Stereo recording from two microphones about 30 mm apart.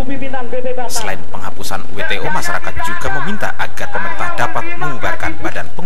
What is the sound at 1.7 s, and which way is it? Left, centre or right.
Speech, centre.